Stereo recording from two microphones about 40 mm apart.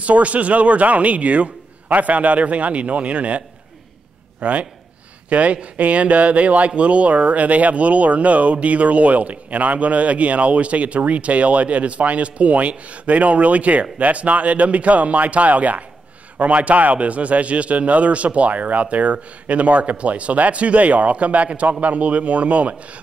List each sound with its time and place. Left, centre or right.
0.0 s speech: right